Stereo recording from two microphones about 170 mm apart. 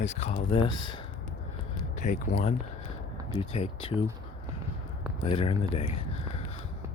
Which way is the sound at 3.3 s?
35° left (ahead or behind).